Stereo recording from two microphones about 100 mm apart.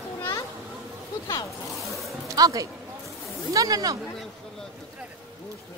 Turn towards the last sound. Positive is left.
turn(degrees=-35)  # may be behind; listen again after turning